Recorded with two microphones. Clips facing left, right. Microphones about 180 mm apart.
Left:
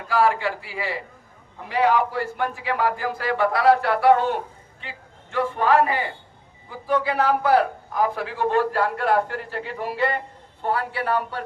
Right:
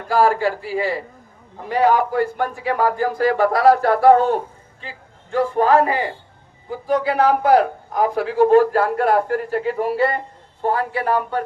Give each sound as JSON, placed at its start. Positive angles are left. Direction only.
{"t": 0.1, "sound": "a man's voice", "side_deg": -35}